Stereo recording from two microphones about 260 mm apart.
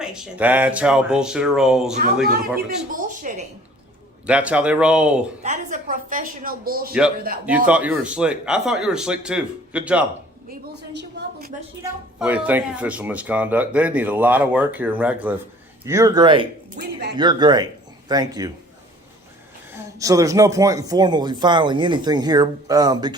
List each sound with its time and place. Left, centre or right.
0.0 s speech: centre
2.9 s speech: right
4.3 s speech: centre
5.4 s a woman's voice: right
7.4 s speech: centre
10.5 s a woman's voice: right
11.8 s speech: centre
16.8 s a woman's voice: right
17.2 s speech: centre
19.7 s speech: centre